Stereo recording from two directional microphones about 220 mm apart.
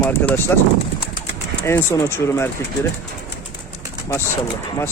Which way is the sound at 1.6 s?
10° left (ahead or behind).